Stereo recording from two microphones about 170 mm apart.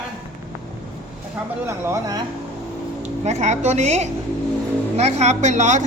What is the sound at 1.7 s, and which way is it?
Speech, 15° right (ahead or behind).